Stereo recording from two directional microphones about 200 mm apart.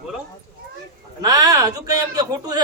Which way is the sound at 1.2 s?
15° right (ahead or behind).